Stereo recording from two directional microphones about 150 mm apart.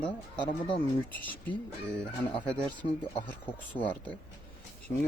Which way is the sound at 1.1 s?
10° left (ahead or behind).